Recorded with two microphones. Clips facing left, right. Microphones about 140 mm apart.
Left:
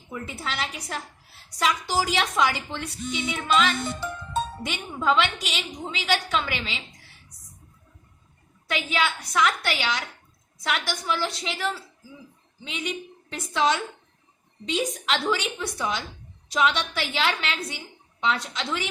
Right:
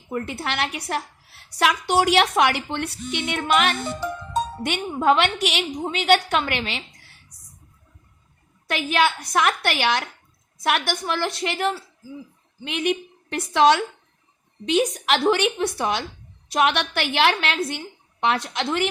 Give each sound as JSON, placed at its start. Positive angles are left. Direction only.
{"t": 0.1, "sound": "a woman's voice", "side_deg": -65}
{"t": 8.7, "sound": "a woman's voice", "side_deg": -60}